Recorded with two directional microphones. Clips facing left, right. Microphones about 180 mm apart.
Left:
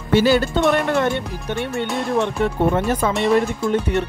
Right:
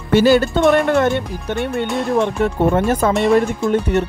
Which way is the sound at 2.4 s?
45° right (ahead or behind).